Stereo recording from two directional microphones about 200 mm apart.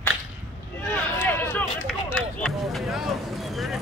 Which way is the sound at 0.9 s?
10° left (ahead or behind).